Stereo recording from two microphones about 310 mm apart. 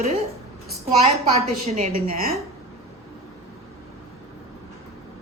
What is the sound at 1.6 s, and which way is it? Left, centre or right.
Speech, right.